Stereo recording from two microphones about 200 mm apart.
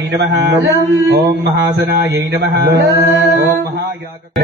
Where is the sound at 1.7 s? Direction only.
60° right (ahead or behind).